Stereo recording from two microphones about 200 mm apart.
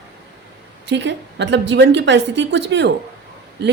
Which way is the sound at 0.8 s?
60° right (ahead or behind).